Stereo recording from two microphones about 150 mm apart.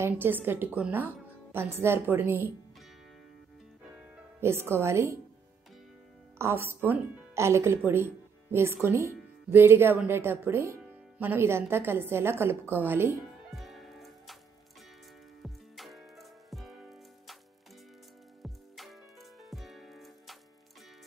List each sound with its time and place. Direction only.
0.0 s a woman's voice: 15° right (ahead or behind)
4.4 s a woman's voice: 15° right (ahead or behind)
6.3 s a woman's voice: 15° right (ahead or behind)
13.5 s music: centre (ahead or behind)
15.4 s music: centre (ahead or behind)
18.4 s music: centre (ahead or behind)